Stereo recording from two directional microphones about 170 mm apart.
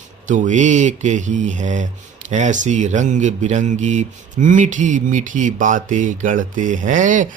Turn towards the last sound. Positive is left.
turn(degrees=-50)  # may be behind; listen again after turning